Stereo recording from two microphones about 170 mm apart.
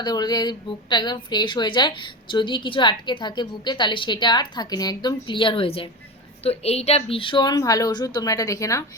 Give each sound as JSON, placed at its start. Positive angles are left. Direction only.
{"t": 0.0, "sound": "a woman's voice", "side_deg": 25}